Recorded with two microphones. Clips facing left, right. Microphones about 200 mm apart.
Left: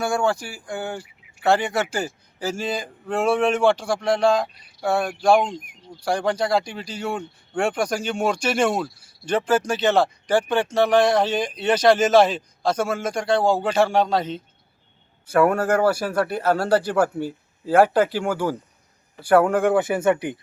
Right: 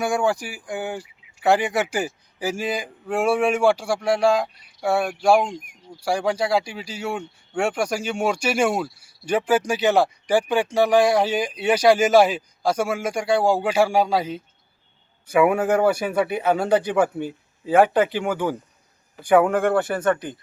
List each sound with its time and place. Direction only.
0.0 s speech: 15° right (ahead or behind)
15.9 s speech: 20° right (ahead or behind)
16.1 s a man's voice: centre (ahead or behind)